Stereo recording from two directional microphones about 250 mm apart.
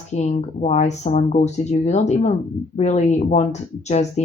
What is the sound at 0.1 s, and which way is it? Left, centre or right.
Speech, left.